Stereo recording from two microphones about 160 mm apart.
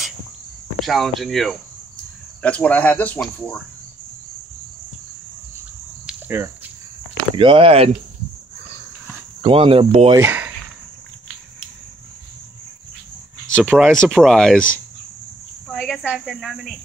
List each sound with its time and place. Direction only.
0.8 s speech: centre (ahead or behind)
6.0 s a sound: 10° right (ahead or behind)
7.3 s speech: 35° right (ahead or behind)
9.4 s speech: 35° right (ahead or behind)
10.1 s speech: 15° right (ahead or behind)
13.7 s speech: centre (ahead or behind)
15.7 s cricket: 5° left (ahead or behind)
16.0 s speech: 5° right (ahead or behind)